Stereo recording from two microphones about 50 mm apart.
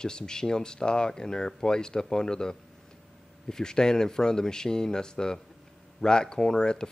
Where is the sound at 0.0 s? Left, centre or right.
Centre.